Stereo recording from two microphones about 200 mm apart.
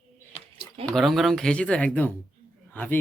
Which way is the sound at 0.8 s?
Centre (ahead or behind).